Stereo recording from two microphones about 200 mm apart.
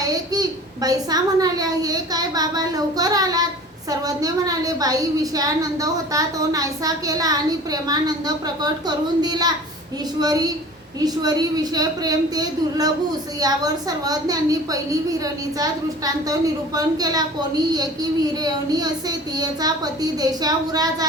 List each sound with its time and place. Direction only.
0.0 s a child's voice: 20° right (ahead or behind)